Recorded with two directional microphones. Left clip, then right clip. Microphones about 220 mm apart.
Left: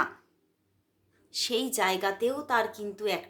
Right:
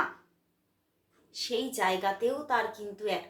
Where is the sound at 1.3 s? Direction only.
50° left (ahead or behind).